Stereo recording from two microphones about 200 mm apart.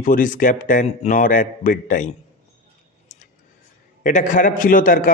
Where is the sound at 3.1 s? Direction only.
40° left (ahead or behind).